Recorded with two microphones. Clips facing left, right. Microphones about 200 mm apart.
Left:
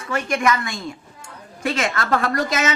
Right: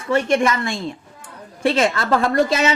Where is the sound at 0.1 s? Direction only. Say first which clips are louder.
Right 4 dB; 30° right (ahead or behind).